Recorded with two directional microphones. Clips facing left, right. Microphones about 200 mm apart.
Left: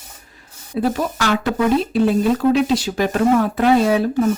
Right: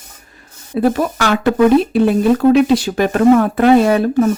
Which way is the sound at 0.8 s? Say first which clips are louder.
Right 5 dB; 55° right (ahead or behind).